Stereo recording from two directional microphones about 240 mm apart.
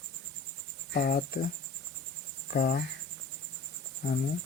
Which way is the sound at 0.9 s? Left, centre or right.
Left.